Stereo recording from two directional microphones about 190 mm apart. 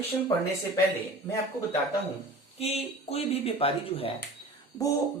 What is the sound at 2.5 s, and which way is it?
Speech, 30° left (ahead or behind).